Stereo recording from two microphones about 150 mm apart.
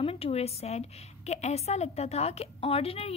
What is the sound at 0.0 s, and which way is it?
A woman's voice, 40° left (ahead or behind).